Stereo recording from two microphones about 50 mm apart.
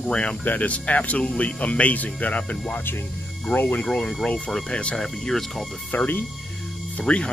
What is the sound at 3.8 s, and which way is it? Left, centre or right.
Speech, left.